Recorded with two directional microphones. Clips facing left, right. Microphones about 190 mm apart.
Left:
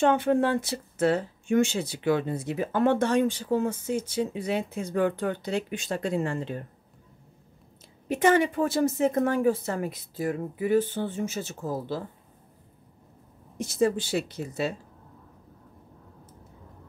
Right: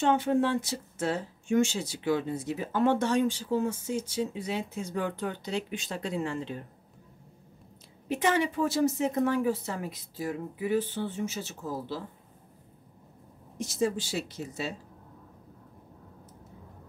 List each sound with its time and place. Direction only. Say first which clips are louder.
0.0 s speech: left 3 dB; 60° left (ahead or behind)
8.1 s a woman's voice: left 5 dB; 50° left (ahead or behind)
13.6 s speech: left 4 dB; 55° left (ahead or behind)